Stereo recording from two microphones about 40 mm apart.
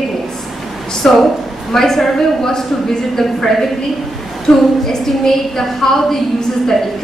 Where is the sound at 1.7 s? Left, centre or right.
Centre.